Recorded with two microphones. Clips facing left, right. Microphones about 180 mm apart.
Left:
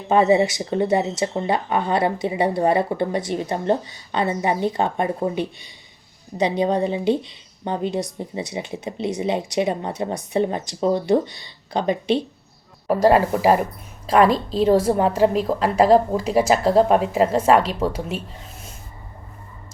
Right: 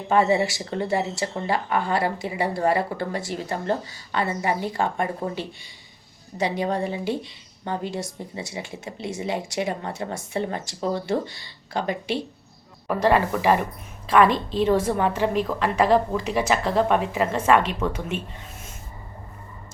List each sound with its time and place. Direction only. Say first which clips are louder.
0.1 s a woman's voice: left 4 dB; 20° left (ahead or behind)
12.9 s a woman's voice: left 4 dB; 35° left (ahead or behind)